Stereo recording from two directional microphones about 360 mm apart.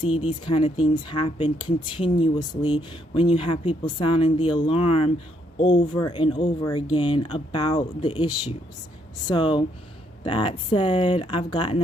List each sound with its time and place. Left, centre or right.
0.0 s speech: centre